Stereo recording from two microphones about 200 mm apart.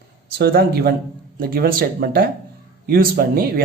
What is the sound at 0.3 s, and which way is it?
Speech, 50° right (ahead or behind).